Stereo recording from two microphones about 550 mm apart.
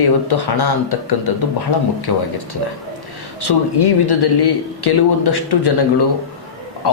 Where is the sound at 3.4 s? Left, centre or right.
Left.